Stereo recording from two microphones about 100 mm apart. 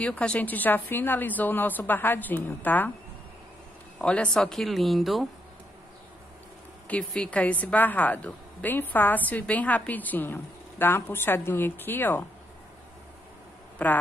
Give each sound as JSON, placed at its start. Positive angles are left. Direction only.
{"t": 0.0, "sound": "a woman's voice", "side_deg": 15}
{"t": 4.0, "sound": "speech", "side_deg": 10}
{"t": 6.9, "sound": "a woman's voice", "side_deg": 15}
{"t": 13.8, "sound": "a woman's voice", "side_deg": 15}